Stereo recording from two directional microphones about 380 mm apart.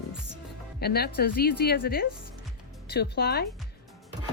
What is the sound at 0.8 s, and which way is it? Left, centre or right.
Speech, left.